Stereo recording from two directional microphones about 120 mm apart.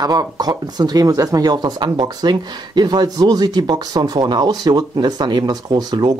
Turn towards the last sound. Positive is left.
turn(degrees=-35)  # may be behind; listen again after turning